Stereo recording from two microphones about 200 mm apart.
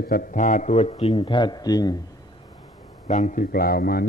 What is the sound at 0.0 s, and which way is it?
A man's voice, 45° left (ahead or behind).